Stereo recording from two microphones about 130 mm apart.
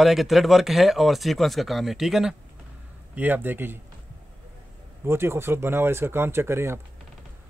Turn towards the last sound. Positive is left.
turn(degrees=-20)  # may be behind; listen again after turning